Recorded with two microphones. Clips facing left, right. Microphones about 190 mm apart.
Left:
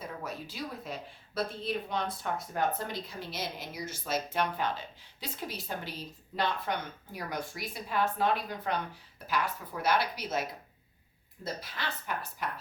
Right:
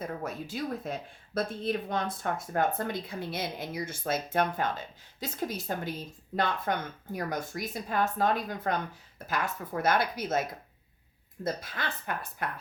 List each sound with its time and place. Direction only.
0.0 s speech: 50° right (ahead or behind)
11.4 s speech: 50° right (ahead or behind)